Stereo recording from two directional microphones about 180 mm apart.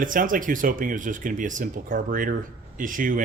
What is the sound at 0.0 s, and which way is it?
A man's voice, 50° right (ahead or behind).